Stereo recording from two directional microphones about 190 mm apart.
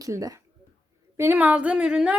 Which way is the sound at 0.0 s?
20° right (ahead or behind).